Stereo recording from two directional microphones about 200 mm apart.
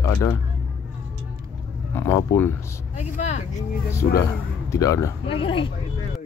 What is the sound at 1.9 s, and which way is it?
Speech, 15° left (ahead or behind).